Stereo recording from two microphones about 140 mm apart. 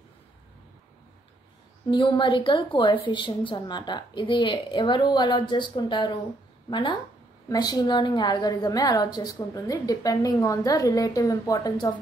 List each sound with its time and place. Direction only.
1.9 s a woman's voice: 35° left (ahead or behind)